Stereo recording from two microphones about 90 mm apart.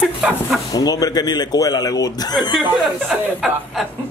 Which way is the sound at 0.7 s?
45° left (ahead or behind).